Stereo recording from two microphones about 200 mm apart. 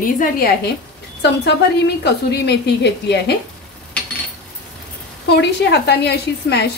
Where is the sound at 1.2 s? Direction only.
60° left (ahead or behind).